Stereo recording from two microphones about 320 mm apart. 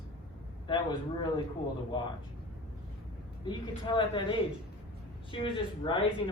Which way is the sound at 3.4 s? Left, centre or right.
Centre.